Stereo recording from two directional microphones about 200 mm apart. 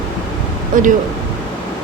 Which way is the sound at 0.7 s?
40° right (ahead or behind).